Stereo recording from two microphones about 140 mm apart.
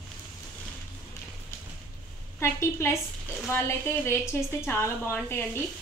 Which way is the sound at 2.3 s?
20° left (ahead or behind).